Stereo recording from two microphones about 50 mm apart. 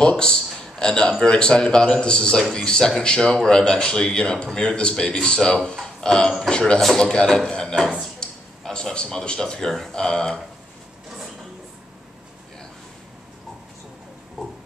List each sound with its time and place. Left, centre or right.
0.1 s a man's voice: centre